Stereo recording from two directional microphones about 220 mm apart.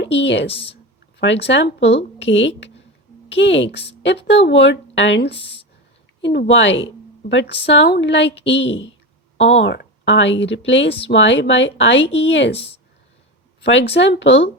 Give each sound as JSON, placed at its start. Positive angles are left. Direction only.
{"t": 0.0, "sound": "a woman's voice", "side_deg": 55}
{"t": 0.4, "sound": "speech", "side_deg": 25}
{"t": 1.5, "sound": "speech", "side_deg": 55}
{"t": 5.4, "sound": "speech", "side_deg": 25}
{"t": 6.5, "sound": "a woman's voice", "side_deg": 60}
{"t": 9.4, "sound": "speech", "side_deg": 25}
{"t": 9.6, "sound": "speech", "side_deg": 50}
{"t": 10.8, "sound": "speech", "side_deg": 25}
{"t": 11.1, "sound": "speech", "side_deg": 55}
{"t": 12.5, "sound": "speech", "side_deg": 25}
{"t": 13.6, "sound": "speech", "side_deg": 55}